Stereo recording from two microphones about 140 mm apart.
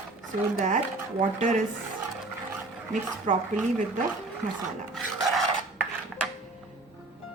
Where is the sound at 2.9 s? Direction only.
60° right (ahead or behind).